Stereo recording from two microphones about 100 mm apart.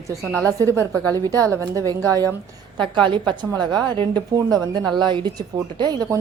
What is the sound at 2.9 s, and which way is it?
A woman's voice, 55° right (ahead or behind).